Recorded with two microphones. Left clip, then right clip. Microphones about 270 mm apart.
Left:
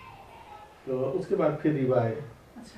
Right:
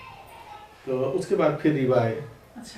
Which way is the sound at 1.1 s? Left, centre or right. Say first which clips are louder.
Right 4 dB; centre.